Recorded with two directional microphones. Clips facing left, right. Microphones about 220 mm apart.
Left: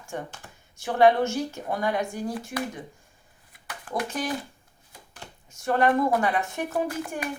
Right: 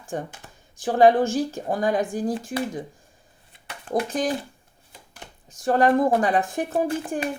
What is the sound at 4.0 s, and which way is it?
Speech, 30° right (ahead or behind).